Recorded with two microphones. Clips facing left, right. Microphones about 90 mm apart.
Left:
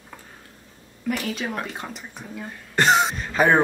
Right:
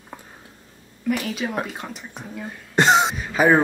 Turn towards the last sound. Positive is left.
turn(degrees=-5)  # may be behind; listen again after turning